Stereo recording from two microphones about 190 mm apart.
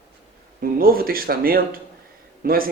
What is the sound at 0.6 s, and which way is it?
Speech, 50° right (ahead or behind).